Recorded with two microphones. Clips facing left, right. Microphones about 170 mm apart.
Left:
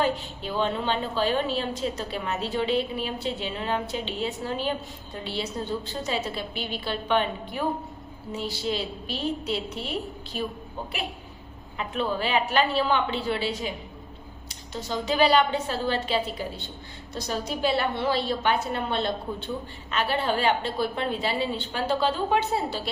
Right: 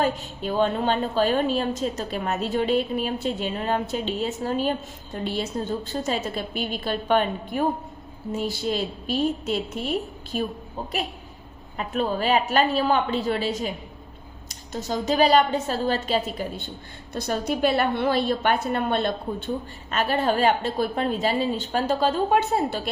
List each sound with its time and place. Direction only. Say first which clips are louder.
0.0 s a woman's voice: right 2 dB; 45° right (ahead or behind)
11.8 s a woman's voice: right 3 dB; 45° right (ahead or behind)